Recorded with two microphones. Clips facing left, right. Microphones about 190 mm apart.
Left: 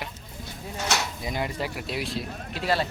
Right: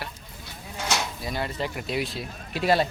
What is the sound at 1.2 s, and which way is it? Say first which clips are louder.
Speech: even; 15° left (ahead or behind).